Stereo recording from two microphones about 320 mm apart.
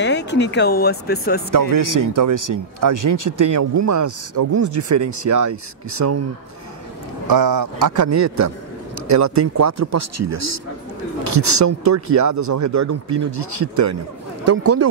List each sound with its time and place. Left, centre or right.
0.0 s speech: left
1.5 s speech: right
7.2 s speech: right
14.4 s speech: right